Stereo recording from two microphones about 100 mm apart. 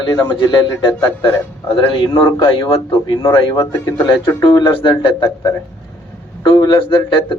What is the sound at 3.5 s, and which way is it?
Speech, 35° left (ahead or behind).